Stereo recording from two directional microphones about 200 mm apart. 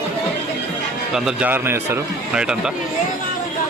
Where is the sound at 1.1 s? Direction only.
5° right (ahead or behind).